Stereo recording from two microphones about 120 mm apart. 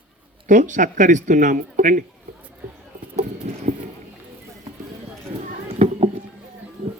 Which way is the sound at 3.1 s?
80° right.